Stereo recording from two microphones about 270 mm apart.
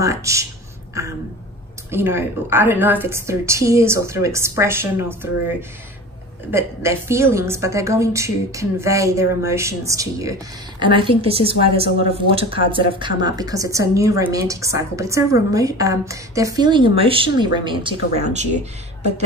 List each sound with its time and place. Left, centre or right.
0.0 s a woman's voice: centre
1.9 s a woman's voice: centre; by 18.7 s right